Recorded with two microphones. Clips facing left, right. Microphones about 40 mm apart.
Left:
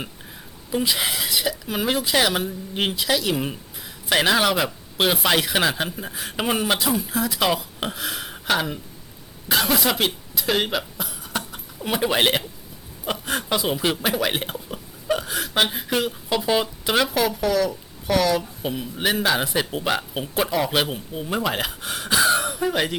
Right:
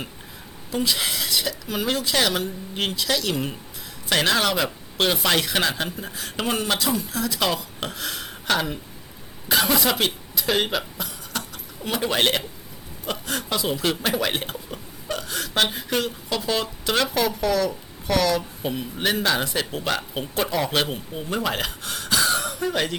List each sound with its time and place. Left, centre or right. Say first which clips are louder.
0.7 s speech: left 1 dB; centre
11.3 s a sound: left 5 dB; centre
11.8 s speech: left 2 dB; centre